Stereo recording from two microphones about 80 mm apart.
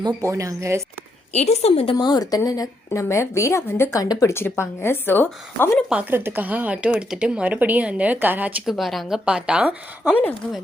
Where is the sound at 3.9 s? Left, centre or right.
Left.